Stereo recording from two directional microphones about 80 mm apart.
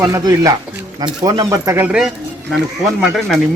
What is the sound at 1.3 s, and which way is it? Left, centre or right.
Speech, right.